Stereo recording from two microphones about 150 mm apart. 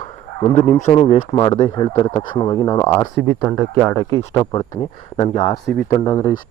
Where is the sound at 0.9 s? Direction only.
35° left (ahead or behind).